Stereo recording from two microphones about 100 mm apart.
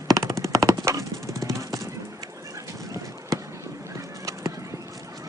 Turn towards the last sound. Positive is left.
turn(degrees=-35)  # may be behind; listen again after turning